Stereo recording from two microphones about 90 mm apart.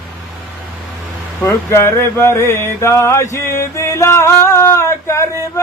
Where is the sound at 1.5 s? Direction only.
30° left (ahead or behind).